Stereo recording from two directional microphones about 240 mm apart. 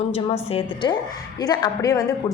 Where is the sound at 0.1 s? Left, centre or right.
Left.